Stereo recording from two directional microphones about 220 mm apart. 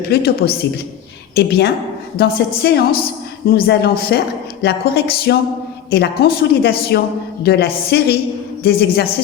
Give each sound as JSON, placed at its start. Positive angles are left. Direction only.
{"t": 0.1, "sound": "speech", "side_deg": 45}
{"t": 1.4, "sound": "speech", "side_deg": 45}